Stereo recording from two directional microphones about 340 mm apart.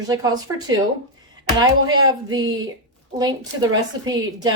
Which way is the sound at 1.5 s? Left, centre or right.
Centre.